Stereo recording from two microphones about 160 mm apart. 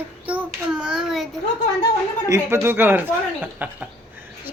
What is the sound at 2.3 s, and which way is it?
Speech, 15° right (ahead or behind).